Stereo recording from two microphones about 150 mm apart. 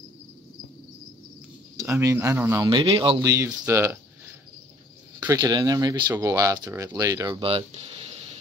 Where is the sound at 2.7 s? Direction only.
35° right (ahead or behind).